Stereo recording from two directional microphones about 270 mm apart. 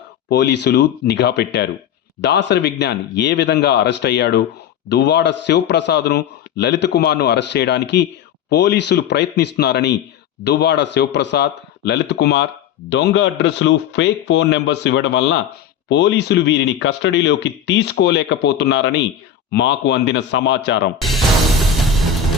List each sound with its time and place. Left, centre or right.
0.3 s speech: left